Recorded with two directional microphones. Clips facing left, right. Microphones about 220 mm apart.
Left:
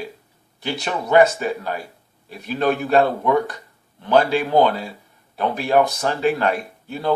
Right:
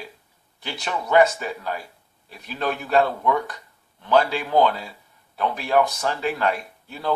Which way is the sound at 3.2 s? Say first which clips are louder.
Left 4 dB; 30° left (ahead or behind).